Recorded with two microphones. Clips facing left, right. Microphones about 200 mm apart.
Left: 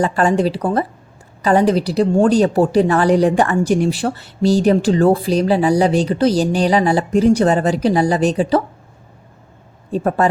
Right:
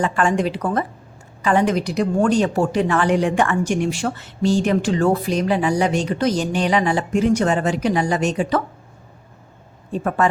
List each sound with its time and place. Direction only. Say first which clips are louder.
0.0 s speech: left 4 dB; 35° left (ahead or behind)
9.9 s speech: left 4 dB; 35° left (ahead or behind)